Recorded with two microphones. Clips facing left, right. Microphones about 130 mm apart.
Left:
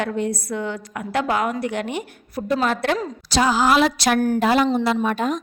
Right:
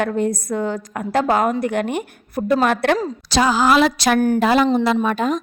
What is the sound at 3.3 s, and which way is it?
Speech, 90° right.